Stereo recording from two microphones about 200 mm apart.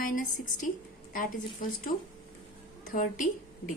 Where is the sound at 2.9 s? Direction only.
40° left (ahead or behind).